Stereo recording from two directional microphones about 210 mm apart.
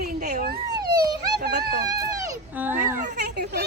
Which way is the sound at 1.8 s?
15° right (ahead or behind).